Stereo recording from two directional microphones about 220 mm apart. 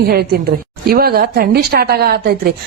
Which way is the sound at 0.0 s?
45° right (ahead or behind).